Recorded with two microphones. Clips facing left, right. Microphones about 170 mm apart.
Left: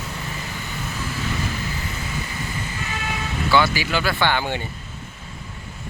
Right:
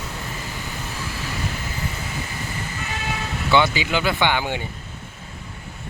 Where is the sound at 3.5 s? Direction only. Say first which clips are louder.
Right 1 dB; 20° right (ahead or behind).